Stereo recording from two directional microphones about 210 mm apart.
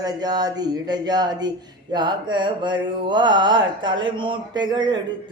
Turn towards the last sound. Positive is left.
turn(degrees=-20)  # may be behind; listen again after turning